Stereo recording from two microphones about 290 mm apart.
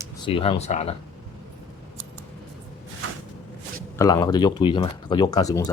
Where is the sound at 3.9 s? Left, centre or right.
Centre.